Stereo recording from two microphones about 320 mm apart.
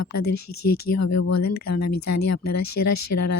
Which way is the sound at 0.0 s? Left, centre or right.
Left.